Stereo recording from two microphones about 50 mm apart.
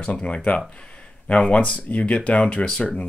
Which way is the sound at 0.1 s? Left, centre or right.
Left.